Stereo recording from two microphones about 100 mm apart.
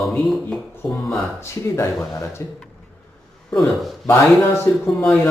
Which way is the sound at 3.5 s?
Centre (ahead or behind).